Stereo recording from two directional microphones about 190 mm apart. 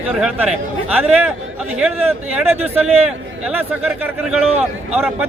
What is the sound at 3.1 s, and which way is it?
Speech, 10° right (ahead or behind).